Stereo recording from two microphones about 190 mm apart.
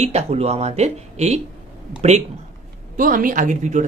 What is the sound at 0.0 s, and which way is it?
Speech, 35° right (ahead or behind).